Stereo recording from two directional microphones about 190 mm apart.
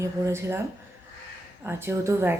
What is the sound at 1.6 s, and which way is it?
Speech, 10° right (ahead or behind).